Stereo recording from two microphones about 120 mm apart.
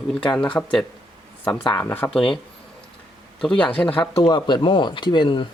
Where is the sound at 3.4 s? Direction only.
5° left (ahead or behind).